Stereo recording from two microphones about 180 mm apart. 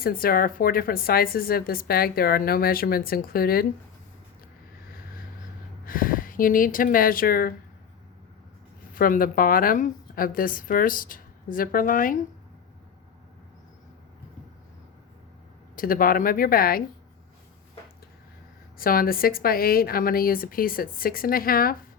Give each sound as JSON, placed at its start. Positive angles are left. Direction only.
{"t": 0.0, "sound": "a woman's voice", "side_deg": 55}
{"t": 5.8, "sound": "speech", "side_deg": 50}
{"t": 9.0, "sound": "a woman's voice", "side_deg": 50}
{"t": 15.7, "sound": "a woman's voice", "side_deg": 50}
{"t": 18.8, "sound": "a woman's voice", "side_deg": 55}